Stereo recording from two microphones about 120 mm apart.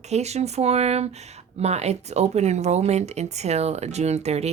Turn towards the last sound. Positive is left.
turn(degrees=-65)  # may be behind; listen again after turning